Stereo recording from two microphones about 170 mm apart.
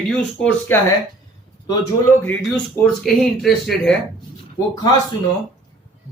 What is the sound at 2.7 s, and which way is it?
Speech, 5° left (ahead or behind).